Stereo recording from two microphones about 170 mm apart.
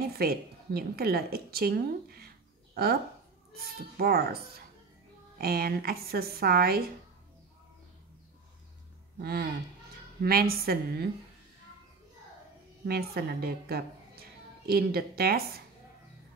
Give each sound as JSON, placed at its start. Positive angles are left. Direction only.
{"t": 0.0, "sound": "a woman's voice", "side_deg": -65}
{"t": 9.2, "sound": "a woman's voice", "side_deg": -65}
{"t": 12.8, "sound": "a woman's voice", "side_deg": -65}